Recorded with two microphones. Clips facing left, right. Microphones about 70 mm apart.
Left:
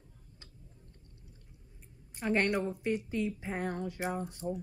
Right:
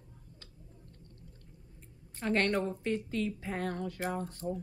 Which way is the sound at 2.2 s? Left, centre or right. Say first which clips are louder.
Even; centre.